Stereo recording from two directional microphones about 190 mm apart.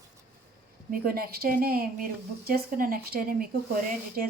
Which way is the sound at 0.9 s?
50° right (ahead or behind).